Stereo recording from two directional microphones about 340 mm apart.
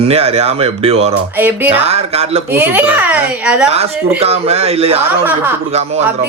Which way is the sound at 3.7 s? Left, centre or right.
Centre.